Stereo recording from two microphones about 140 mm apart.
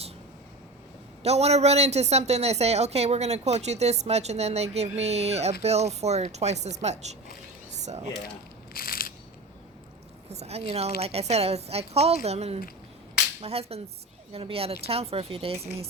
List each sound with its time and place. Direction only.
1.2 s a woman's voice: 50° right (ahead or behind)
8.7 s a sound: 90° left
10.2 s a woman's voice: 50° right (ahead or behind)